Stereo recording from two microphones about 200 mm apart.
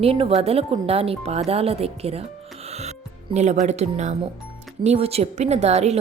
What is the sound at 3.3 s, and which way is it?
A woman's voice, 35° right (ahead or behind).